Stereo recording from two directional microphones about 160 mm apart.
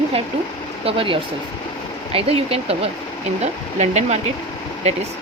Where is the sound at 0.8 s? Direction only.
35° right (ahead or behind).